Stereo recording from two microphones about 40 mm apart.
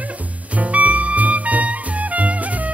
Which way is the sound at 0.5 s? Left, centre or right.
Right.